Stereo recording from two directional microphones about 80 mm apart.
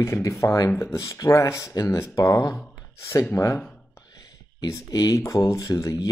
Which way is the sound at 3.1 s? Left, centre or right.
Left.